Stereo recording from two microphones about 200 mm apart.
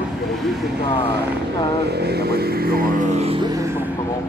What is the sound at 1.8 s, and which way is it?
Vehicle, 55° right (ahead or behind).